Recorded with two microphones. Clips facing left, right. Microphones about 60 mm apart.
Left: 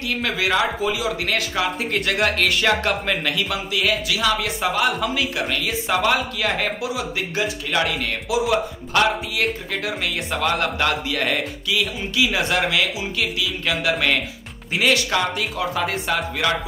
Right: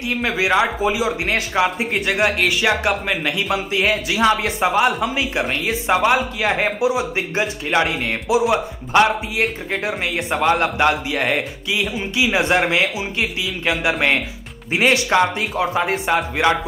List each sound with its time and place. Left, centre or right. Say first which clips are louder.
0.0 s speech: right 3 dB; right
3.3 s speech: right 3 dB; right